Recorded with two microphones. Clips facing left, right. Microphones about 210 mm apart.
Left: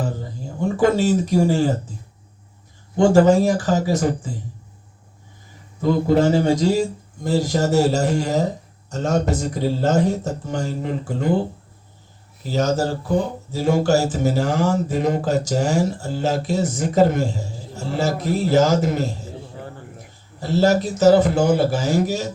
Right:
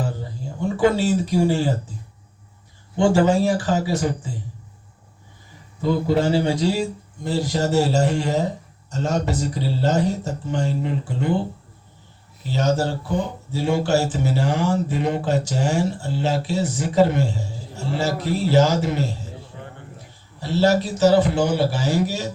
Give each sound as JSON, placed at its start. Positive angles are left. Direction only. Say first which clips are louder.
{"t": 0.8, "sound": "a man's voice", "louder": "left 1 dB", "side_deg": 45}
{"t": 3.0, "sound": "a man's voice", "louder": "left 3 dB", "side_deg": 45}
{"t": 5.8, "sound": "a man's voice", "louder": "left 3 dB", "side_deg": 45}
{"t": 12.4, "sound": "a man's voice", "louder": "left 1 dB", "side_deg": 40}
{"t": 20.4, "sound": "a man's voice", "louder": "left 1 dB", "side_deg": 45}